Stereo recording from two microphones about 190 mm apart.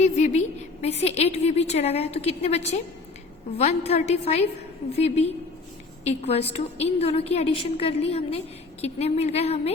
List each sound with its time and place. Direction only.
0.0 s a woman's voice: 35° left (ahead or behind)